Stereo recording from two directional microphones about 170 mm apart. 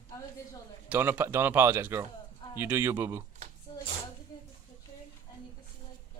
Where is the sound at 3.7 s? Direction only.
30° left (ahead or behind).